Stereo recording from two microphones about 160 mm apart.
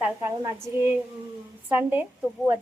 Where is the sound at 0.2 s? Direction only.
15° right (ahead or behind).